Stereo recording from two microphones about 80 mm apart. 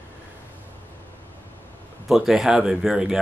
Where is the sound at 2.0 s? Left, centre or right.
Centre.